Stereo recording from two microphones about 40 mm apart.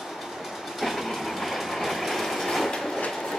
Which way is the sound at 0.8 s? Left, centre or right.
Centre.